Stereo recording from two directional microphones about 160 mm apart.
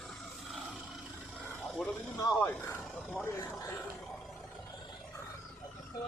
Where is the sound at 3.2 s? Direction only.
15° left (ahead or behind).